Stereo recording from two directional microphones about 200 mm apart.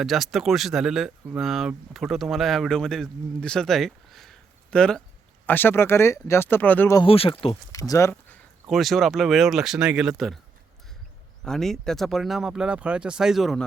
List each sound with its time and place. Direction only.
0.0 s speech: centre (ahead or behind)
7.0 s speech: 25° left (ahead or behind)
7.7 s speech: 15° left (ahead or behind); by 10.3 s centre (ahead or behind)
11.4 s speech: centre (ahead or behind)